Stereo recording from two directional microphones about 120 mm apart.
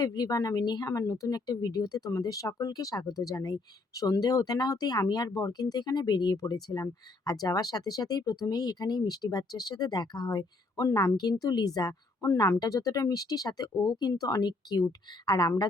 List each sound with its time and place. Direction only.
0.0 s speech: 30° left (ahead or behind)